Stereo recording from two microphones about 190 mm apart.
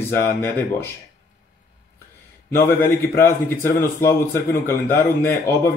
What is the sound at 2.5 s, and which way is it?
Speech, 10° left (ahead or behind).